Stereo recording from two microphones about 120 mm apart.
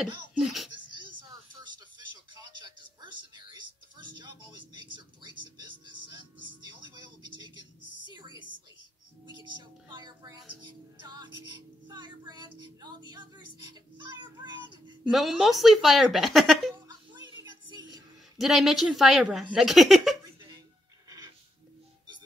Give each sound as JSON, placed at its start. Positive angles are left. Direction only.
{"t": 0.3, "sound": "speech", "side_deg": -5}
{"t": 2.3, "sound": "music", "side_deg": -40}
{"t": 4.2, "sound": "a sound", "side_deg": -40}
{"t": 9.5, "sound": "music", "side_deg": -35}
{"t": 15.0, "sound": "speech", "side_deg": 0}
{"t": 16.8, "sound": "music", "side_deg": -35}
{"t": 18.4, "sound": "speech", "side_deg": 0}